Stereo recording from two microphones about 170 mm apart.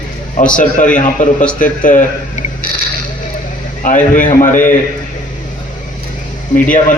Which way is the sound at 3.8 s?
50° left (ahead or behind).